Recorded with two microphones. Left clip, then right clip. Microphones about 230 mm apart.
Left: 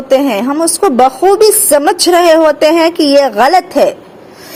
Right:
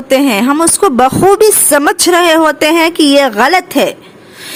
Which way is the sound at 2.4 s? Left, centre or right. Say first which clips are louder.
Left 1 dB; right.